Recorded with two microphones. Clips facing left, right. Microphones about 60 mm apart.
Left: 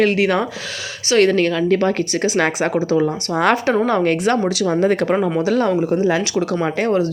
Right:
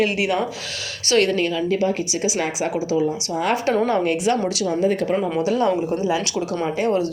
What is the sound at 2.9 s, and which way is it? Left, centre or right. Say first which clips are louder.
Speech: left 3 dB; left.